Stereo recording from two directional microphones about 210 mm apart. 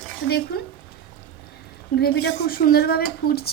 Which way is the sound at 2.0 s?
45° left (ahead or behind).